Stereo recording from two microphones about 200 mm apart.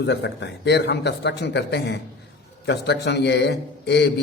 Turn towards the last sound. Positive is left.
turn(degrees=55)  # may be behind; listen again after turning